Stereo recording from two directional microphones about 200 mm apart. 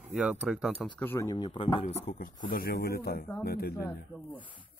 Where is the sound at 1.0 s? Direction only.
15° left (ahead or behind); by 2.0 s 30° left (ahead or behind).